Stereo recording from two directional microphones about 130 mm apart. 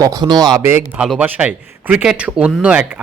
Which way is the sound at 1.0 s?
5° right (ahead or behind).